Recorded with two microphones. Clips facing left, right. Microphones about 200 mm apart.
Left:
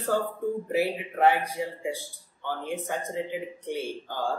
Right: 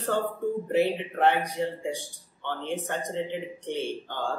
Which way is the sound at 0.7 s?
5° left (ahead or behind).